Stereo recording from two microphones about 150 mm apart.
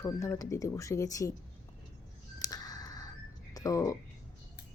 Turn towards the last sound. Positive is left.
turn(degrees=20)  # may be behind; listen again after turning